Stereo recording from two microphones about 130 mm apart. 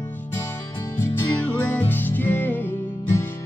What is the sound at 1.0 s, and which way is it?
Music, 15° left (ahead or behind).